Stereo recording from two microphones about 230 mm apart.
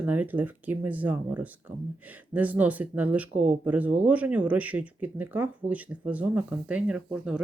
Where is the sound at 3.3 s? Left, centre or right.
Right.